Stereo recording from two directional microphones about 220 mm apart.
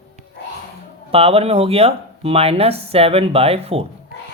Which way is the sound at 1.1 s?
25° right (ahead or behind).